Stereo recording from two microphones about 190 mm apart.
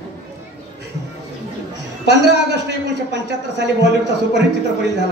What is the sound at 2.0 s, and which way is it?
A man's voice, 65° right (ahead or behind).